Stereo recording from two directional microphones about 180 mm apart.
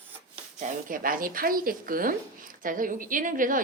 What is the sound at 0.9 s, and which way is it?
Speech, 50° right (ahead or behind).